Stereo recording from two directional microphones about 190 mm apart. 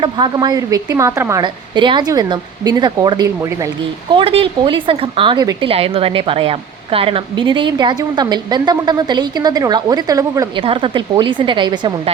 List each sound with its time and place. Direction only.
0.0 s speech: 20° right (ahead or behind)
4.1 s speech: 30° right (ahead or behind)